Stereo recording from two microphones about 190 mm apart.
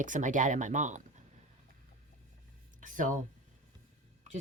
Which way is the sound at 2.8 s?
45° right (ahead or behind).